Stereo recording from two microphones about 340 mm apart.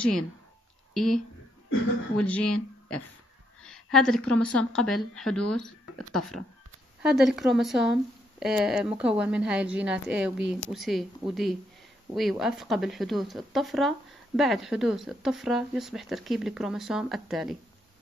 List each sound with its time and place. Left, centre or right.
0.9 s speech: centre
3.6 s a woman's voice: centre